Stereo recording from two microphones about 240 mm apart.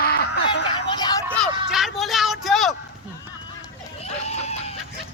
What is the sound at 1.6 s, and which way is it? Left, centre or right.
Speech, centre.